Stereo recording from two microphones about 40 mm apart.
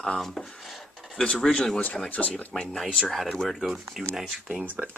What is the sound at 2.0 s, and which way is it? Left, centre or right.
Speech, left.